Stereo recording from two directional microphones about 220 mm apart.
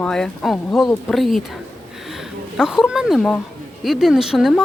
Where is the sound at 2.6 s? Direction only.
5° right (ahead or behind).